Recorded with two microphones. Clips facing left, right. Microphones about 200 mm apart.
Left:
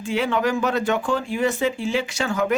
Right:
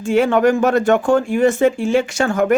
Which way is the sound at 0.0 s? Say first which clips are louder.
Right 8 dB; 50° right (ahead or behind).